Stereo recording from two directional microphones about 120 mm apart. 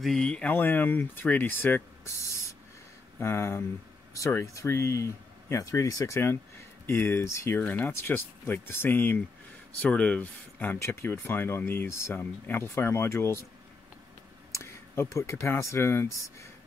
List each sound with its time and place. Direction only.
0.0 s speech: 5° left (ahead or behind); by 13.5 s 20° left (ahead or behind)
14.5 s speech: 25° left (ahead or behind)